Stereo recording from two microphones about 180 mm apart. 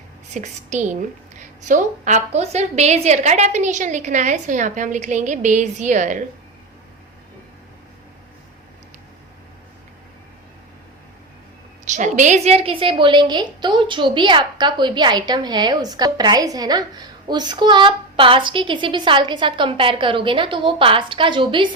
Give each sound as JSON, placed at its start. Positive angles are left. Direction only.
{"t": 0.3, "sound": "a woman's voice", "side_deg": -40}
{"t": 11.9, "sound": "a woman's voice", "side_deg": -40}